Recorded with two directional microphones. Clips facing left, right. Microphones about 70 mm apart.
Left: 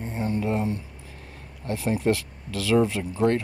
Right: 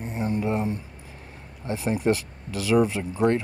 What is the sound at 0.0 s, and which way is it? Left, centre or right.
Mantra, centre.